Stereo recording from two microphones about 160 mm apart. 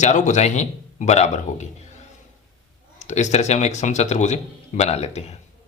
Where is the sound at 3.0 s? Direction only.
45° left (ahead or behind).